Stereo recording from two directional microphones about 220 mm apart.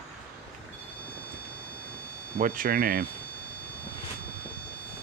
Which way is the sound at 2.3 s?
40° right (ahead or behind).